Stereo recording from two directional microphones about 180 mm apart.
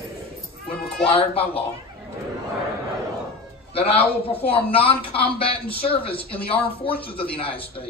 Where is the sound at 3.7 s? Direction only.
30° left (ahead or behind).